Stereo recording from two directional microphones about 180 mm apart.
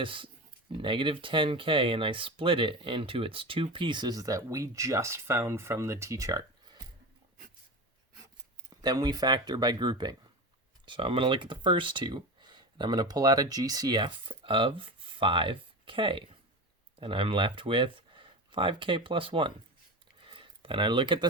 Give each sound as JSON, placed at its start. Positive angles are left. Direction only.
{"t": 0.0, "sound": "speech", "side_deg": -30}
{"t": 8.8, "sound": "speech", "side_deg": -20}
{"t": 20.2, "sound": "a sound", "side_deg": -25}